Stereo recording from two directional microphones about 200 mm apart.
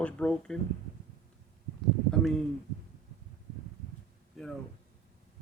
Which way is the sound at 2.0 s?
5° left (ahead or behind).